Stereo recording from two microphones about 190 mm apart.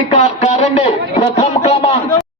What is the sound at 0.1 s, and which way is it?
A man's voice, 35° left (ahead or behind).